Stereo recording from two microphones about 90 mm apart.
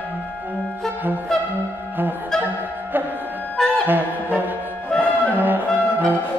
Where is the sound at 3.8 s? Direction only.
20° right (ahead or behind).